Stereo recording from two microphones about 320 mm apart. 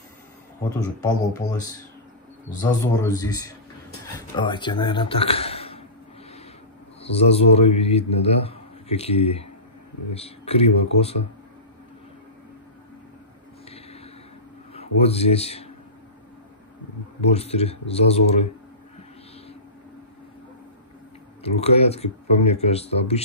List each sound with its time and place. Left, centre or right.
0.7 s a man's voice: centre
7.0 s a man's voice: centre
13.7 s a sound: centre
14.7 s speech: centre
17.3 s a man's voice: centre
21.4 s a man's voice: centre